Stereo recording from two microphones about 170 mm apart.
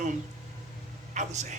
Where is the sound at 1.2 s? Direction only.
45° right (ahead or behind).